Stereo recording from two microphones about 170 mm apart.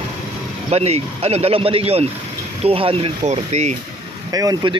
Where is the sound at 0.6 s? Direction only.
40° right (ahead or behind).